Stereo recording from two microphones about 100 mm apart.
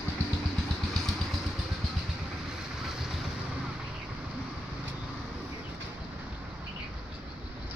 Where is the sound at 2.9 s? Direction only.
5° right (ahead or behind).